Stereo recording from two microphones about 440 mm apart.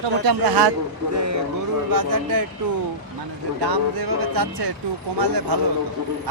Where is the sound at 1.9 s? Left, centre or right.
Right.